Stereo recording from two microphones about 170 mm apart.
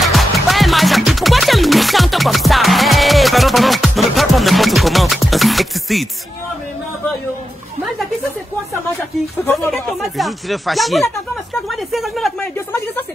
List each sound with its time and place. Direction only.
0.0 s music: centre (ahead or behind)
9.8 s speech: centre (ahead or behind)